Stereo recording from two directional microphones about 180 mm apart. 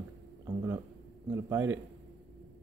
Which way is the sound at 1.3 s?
15° right (ahead or behind).